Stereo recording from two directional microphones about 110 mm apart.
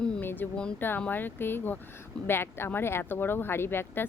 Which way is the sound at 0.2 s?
20° left (ahead or behind).